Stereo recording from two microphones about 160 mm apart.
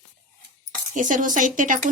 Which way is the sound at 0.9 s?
55° right (ahead or behind).